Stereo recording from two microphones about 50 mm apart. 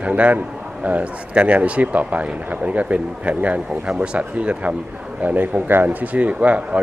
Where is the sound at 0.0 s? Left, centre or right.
Right.